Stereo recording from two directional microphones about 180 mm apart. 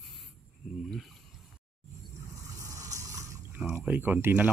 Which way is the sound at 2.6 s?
20° right (ahead or behind).